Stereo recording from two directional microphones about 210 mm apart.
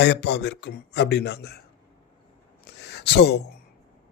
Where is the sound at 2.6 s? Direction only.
55° left (ahead or behind).